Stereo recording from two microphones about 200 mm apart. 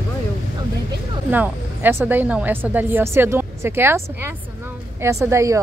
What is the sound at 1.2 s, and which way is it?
A woman's voice, 10° right (ahead or behind).